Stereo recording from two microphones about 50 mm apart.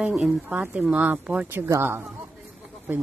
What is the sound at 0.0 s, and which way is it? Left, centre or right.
Speech, right.